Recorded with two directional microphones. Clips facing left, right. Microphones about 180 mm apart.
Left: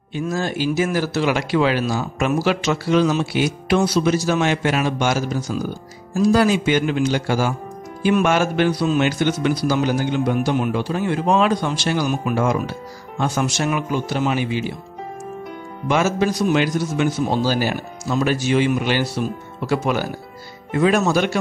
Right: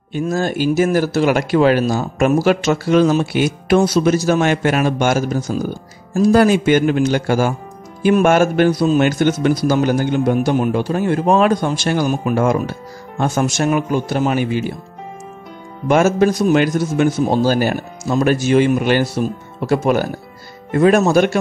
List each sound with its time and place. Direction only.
0.1 s speech: 45° right (ahead or behind)
15.9 s speech: 50° right (ahead or behind)